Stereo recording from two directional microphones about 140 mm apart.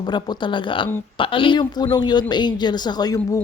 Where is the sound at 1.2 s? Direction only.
40° left (ahead or behind).